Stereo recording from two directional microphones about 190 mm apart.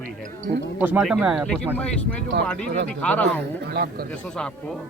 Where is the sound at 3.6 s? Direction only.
55° right (ahead or behind).